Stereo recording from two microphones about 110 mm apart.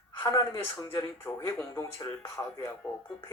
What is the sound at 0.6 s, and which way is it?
Speech, 20° left (ahead or behind).